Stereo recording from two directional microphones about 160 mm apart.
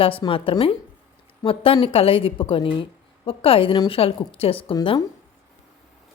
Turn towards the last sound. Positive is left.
turn(degrees=35)  # may be behind; listen again after turning